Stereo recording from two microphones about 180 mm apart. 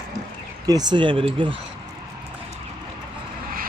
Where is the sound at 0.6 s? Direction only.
25° right (ahead or behind).